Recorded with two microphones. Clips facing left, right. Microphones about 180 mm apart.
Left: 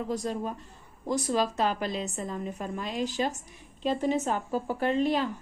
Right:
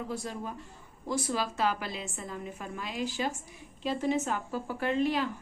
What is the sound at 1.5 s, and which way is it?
A woman's voice, 40° left (ahead or behind).